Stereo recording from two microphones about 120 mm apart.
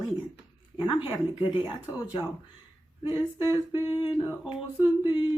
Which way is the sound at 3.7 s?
40° left (ahead or behind).